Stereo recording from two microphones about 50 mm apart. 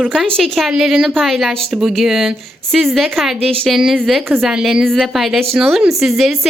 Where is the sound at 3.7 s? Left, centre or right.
Centre.